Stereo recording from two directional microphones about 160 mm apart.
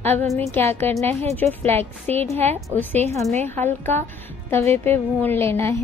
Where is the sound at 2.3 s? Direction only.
40° right (ahead or behind).